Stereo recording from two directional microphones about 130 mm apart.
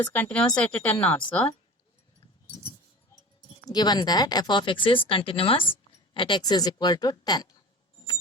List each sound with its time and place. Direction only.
0.1 s speech: 10° left (ahead or behind)
3.7 s speech: 30° left (ahead or behind)